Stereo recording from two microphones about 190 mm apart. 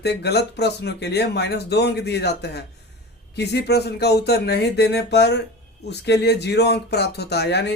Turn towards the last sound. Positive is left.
turn(degrees=60)  # may be behind; listen again after turning